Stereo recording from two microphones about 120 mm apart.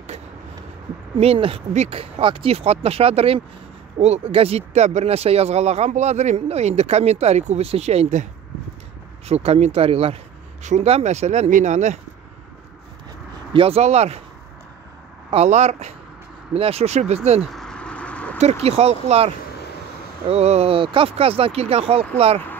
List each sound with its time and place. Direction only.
1.1 s speech: 50° right (ahead or behind); by 8.3 s 75° right (ahead or behind)
9.3 s speech: 60° right (ahead or behind)
10.6 s speech: 75° right (ahead or behind)
13.5 s speech: 50° right (ahead or behind)
15.3 s speech: 65° right (ahead or behind)
16.5 s speech: 55° right (ahead or behind)
17.5 s a sound: 5° left (ahead or behind)
18.4 s speech: 60° right (ahead or behind)